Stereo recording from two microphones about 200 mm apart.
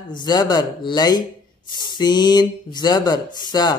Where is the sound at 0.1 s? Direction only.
20° left (ahead or behind).